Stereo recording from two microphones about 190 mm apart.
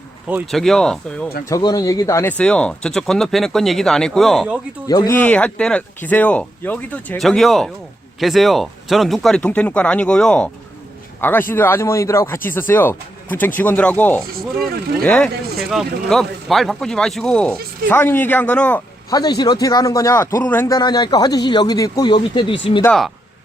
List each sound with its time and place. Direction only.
0.3 s speech: 10° right (ahead or behind)
0.6 s speech: centre (ahead or behind)
1.5 s speech: 20° left (ahead or behind); by 4.5 s centre (ahead or behind)
4.9 s speech: 20° left (ahead or behind)
5.1 s speech: 10° left (ahead or behind)
19.1 s speech: 20° left (ahead or behind)
22.8 s speech: 5° left (ahead or behind)